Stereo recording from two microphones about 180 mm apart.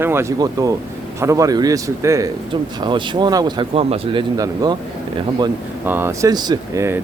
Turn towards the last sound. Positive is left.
turn(degrees=-15)  # may be behind; listen again after turning